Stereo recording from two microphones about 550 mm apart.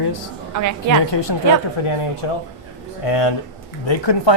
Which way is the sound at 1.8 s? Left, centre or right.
Left.